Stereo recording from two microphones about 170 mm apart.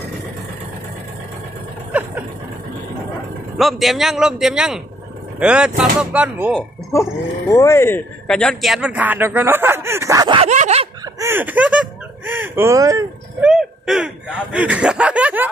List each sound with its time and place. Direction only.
1.9 s a sound: 10° right (ahead or behind)
3.5 s a man's voice: centre (ahead or behind)
7.5 s speech: 15° left (ahead or behind)
8.3 s speech: 5° left (ahead or behind); by 10.4 s 20° right (ahead or behind)
10.4 s zipper: 40° right (ahead or behind)
11.1 s speech: 15° right (ahead or behind)
13.4 s speech: 5° right (ahead or behind)